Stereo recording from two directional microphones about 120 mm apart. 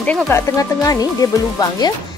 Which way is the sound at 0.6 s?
30° left (ahead or behind).